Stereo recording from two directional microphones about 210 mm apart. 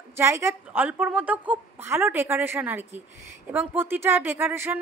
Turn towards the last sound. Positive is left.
turn(degrees=-10)  # may be behind; listen again after turning